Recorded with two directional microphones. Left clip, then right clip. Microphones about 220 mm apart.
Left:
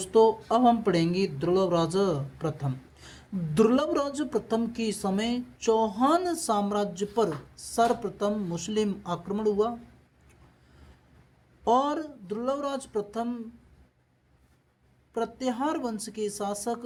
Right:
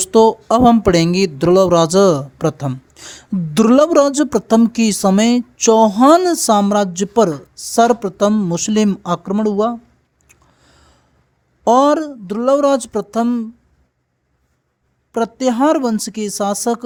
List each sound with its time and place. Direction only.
0.0 s speech: 50° right (ahead or behind)
11.6 s speech: 50° right (ahead or behind)
15.1 s speech: 45° right (ahead or behind)